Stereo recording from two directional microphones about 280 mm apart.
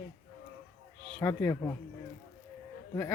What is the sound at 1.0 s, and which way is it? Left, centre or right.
Speech, centre.